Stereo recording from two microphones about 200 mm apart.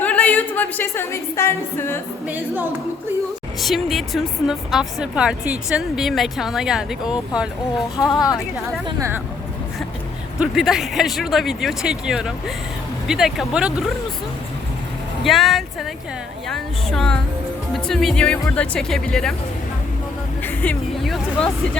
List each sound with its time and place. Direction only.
0.0 s speech: 5° left (ahead or behind)
2.2 s a woman's voice: 10° right (ahead or behind)
7.9 s a woman's voice: 20° left (ahead or behind)
9.0 s a woman's voice: 15° right (ahead or behind)
10.4 s speech: centre (ahead or behind)
15.2 s speech: centre (ahead or behind)
20.4 s speech: 5° left (ahead or behind)